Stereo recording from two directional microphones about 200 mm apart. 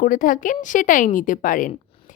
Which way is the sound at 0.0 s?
40° left (ahead or behind).